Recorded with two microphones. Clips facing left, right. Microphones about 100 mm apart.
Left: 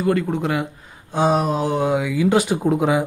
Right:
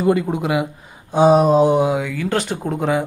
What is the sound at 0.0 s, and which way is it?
Speech, 15° right (ahead or behind).